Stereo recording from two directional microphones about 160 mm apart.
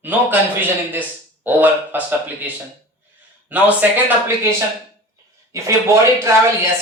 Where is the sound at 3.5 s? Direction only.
10° right (ahead or behind).